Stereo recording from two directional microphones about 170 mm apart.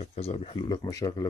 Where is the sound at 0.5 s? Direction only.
25° left (ahead or behind).